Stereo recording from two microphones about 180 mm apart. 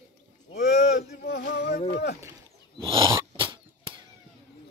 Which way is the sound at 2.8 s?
25° right (ahead or behind).